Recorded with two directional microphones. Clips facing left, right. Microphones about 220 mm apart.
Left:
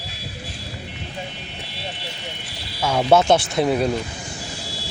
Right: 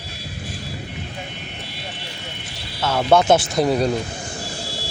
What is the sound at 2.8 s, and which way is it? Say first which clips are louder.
Speech: even; 10° left (ahead or behind).